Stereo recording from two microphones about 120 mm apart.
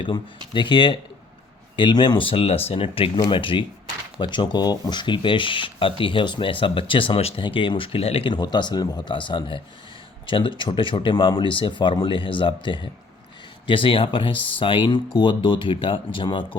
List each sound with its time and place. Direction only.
0.5 s speech: 40° left (ahead or behind)
7.4 s speech: 45° left (ahead or behind)
8.3 s speech: 40° left (ahead or behind)